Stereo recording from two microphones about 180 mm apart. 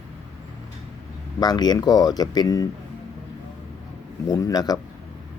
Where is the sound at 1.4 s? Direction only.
25° left (ahead or behind).